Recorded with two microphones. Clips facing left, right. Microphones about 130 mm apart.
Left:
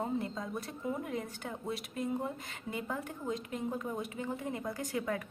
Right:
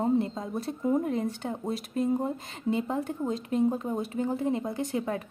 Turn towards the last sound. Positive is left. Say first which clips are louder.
# right 5 dB
turn(degrees=-30)  # may be behind; listen again after turning